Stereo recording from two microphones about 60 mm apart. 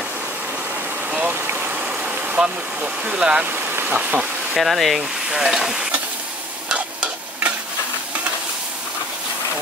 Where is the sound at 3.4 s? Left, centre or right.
Right.